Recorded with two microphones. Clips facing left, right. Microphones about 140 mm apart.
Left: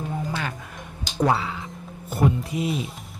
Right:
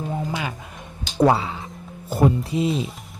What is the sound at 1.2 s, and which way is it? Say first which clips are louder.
Speech: right 4 dB; 25° right (ahead or behind).